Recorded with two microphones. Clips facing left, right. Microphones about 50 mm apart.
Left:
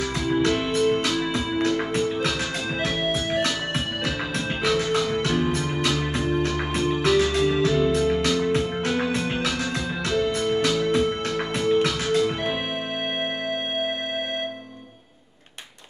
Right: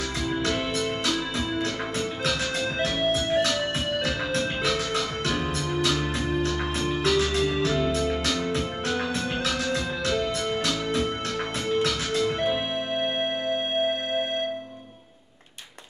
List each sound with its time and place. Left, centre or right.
0.3 s music: centre
3.3 s music: centre
4.6 s music: centre
10.0 s organ: centre
11.6 s music: centre